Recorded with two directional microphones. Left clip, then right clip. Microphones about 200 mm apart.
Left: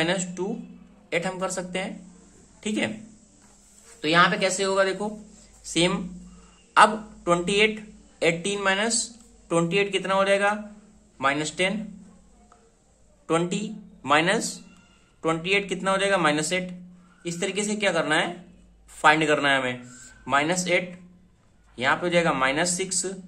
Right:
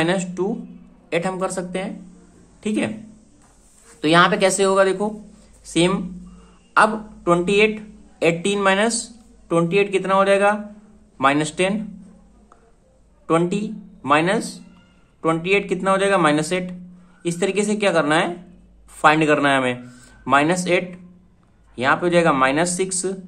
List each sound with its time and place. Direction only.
0.0 s speech: 20° right (ahead or behind)
4.0 s a woman's voice: 25° right (ahead or behind)
9.0 s a woman's voice: 5° right (ahead or behind)
13.3 s a woman's voice: 10° right (ahead or behind)